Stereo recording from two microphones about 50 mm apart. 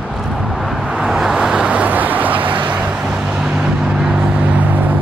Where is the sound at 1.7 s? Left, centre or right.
Right.